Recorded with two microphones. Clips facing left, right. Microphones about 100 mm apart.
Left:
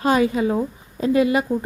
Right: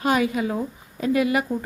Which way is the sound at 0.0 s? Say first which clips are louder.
Left 3 dB; 30° left (ahead or behind).